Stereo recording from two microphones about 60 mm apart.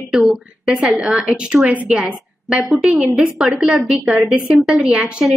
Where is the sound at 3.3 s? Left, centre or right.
Centre.